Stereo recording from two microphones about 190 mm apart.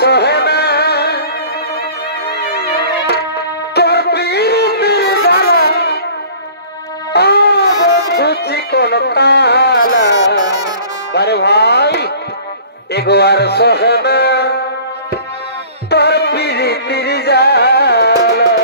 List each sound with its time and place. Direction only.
0.0 s music: 60° left (ahead or behind)
3.1 s music: 60° left (ahead or behind)
7.1 s baby cry: 60° left (ahead or behind)
8.1 s music: 60° left (ahead or behind)
15.9 s music: 60° left (ahead or behind)